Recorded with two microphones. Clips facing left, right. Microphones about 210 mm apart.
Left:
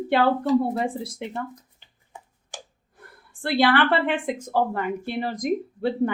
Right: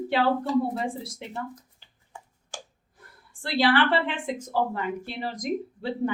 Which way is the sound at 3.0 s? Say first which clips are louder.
Left 5 dB; 60° left (ahead or behind).